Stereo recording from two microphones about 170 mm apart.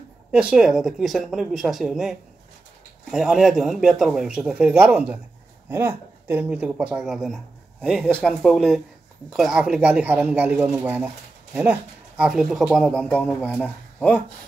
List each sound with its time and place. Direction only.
0.3 s speech: 5° right (ahead or behind)